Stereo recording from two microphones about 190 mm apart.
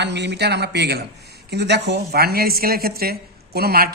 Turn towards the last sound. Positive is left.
turn(degrees=-55)  # may be behind; listen again after turning